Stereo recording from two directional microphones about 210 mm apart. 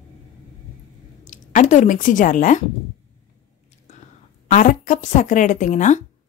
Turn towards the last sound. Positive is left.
turn(degrees=35)  # may be behind; listen again after turning